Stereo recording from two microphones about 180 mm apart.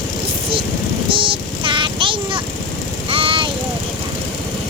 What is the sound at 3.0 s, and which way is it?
Vehicle, 30° right (ahead or behind).